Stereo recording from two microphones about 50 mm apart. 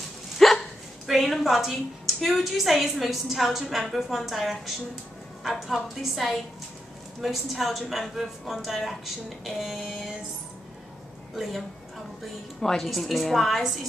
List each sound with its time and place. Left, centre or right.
0.4 s hiccup: centre
1.0 s a woman's voice: centre
12.5 s a woman's voice: centre